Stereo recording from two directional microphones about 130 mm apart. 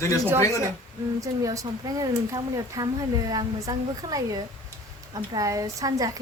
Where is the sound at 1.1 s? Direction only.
25° right (ahead or behind).